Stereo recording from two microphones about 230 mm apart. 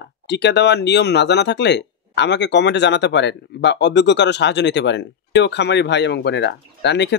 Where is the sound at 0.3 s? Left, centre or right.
Left.